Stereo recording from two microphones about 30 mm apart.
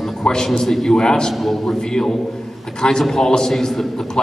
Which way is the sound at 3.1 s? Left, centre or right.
Centre.